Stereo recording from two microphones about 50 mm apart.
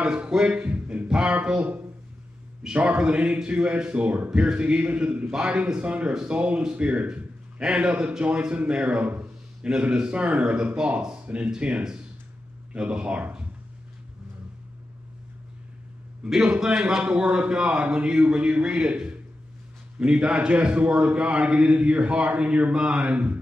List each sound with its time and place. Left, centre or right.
0.0 s speech: centre
1.0 s a sound: centre
1.3 s speech: right
16.3 s speech: centre